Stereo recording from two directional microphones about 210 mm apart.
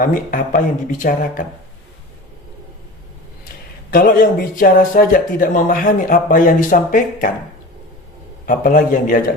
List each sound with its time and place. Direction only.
0.0 s speech: 40° left (ahead or behind)
3.9 s speech: 45° left (ahead or behind)
8.4 s speech: 40° left (ahead or behind)